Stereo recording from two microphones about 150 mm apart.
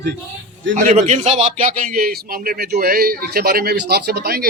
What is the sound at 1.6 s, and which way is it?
A man's voice, 75° right (ahead or behind).